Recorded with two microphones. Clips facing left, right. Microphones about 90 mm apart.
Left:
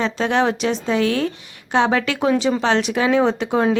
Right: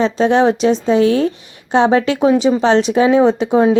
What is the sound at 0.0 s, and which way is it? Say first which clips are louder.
Speech: right 6 dB; 20° right (ahead or behind).